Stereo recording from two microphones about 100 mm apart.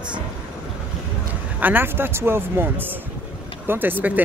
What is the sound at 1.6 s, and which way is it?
Speech, 20° right (ahead or behind).